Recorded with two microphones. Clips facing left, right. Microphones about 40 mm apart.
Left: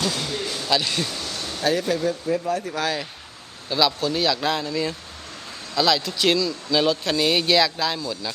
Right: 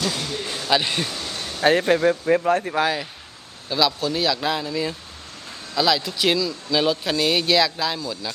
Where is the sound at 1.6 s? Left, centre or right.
Right.